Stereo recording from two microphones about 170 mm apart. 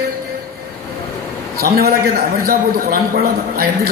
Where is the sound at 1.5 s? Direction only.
65° right (ahead or behind).